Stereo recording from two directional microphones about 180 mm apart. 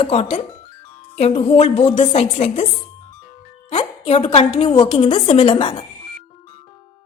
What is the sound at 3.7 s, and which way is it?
A woman's voice, 35° left (ahead or behind).